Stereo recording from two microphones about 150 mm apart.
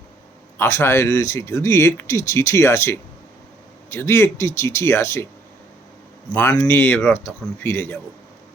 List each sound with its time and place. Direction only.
0.6 s a man's voice: 15° left (ahead or behind)
6.3 s a man's voice: 10° left (ahead or behind)